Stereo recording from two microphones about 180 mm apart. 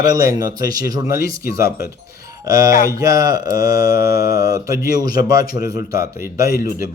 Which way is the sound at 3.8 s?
60° left (ahead or behind).